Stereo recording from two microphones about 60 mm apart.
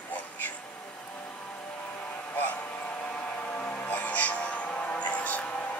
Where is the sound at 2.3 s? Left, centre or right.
Left.